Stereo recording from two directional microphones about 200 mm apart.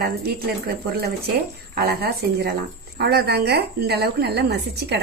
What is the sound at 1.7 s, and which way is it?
A woman's voice, 50° right (ahead or behind).